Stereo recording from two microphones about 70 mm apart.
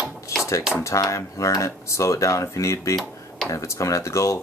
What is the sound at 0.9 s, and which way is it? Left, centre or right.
Speech, left.